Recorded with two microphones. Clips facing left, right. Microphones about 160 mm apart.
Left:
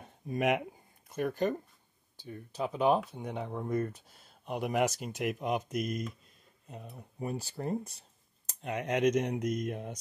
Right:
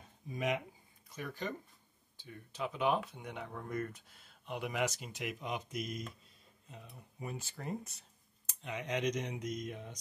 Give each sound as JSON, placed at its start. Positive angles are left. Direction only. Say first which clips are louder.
{"t": 0.0, "sound": "a sound", "louder": "left 7 dB", "side_deg": 65}
{"t": 1.0, "sound": "speech", "louder": "left 11 dB", "side_deg": 55}
{"t": 2.2, "sound": "speech", "louder": "left 5 dB", "side_deg": 40}
{"t": 6.9, "sound": "speech", "louder": "left 7 dB", "side_deg": 40}
{"t": 8.5, "sound": "speech", "louder": "left 6 dB", "side_deg": 50}